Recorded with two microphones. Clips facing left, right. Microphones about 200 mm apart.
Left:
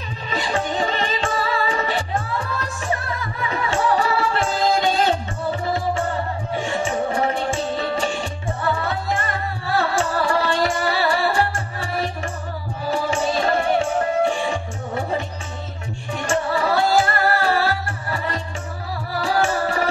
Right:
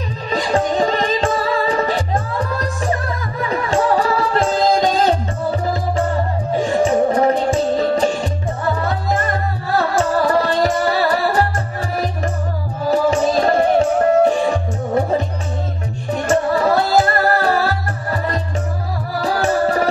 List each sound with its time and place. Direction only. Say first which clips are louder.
0.3 s music: right 6 dB; 35° right (ahead or behind)
6.5 s music: right 8 dB; 40° right (ahead or behind)
12.9 s music: right 6 dB; 40° right (ahead or behind)
16.3 s music: right 5 dB; 40° right (ahead or behind)